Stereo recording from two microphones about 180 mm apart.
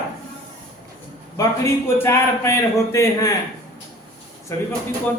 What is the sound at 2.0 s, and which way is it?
A man's voice, 15° left (ahead or behind).